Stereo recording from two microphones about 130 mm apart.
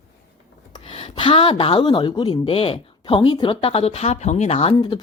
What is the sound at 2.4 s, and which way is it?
Speech, 45° left (ahead or behind).